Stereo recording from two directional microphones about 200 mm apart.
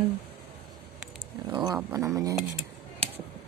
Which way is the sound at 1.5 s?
20° right (ahead or behind).